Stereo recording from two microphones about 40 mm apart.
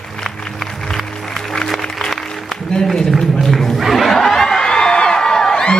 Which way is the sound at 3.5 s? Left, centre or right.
Centre.